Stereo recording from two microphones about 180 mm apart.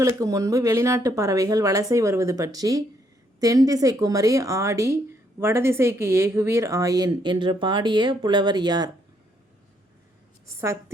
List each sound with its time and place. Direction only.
0.0 s speech: 20° right (ahead or behind)
10.4 s a woman's voice: 15° right (ahead or behind)